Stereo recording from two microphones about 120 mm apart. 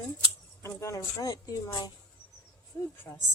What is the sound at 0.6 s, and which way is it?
A woman's voice, 25° left (ahead or behind).